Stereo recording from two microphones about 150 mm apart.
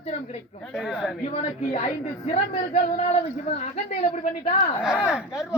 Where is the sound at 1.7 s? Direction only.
50° left (ahead or behind).